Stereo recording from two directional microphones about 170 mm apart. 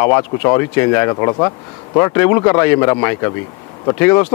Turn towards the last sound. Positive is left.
turn(degrees=15)  # may be behind; listen again after turning